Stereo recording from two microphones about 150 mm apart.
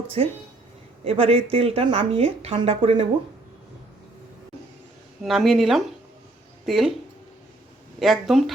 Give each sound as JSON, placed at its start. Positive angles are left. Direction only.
{"t": 0.2, "sound": "speech", "side_deg": -40}
{"t": 5.2, "sound": "speech", "side_deg": 0}
{"t": 7.9, "sound": "speech", "side_deg": 0}